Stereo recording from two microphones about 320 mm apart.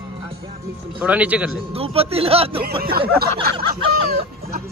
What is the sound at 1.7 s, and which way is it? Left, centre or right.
Speech, centre.